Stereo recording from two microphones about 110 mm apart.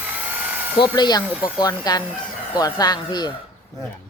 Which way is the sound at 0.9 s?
40° left (ahead or behind).